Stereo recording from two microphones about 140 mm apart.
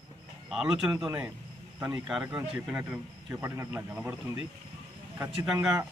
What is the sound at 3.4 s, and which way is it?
A man's voice, 20° right (ahead or behind).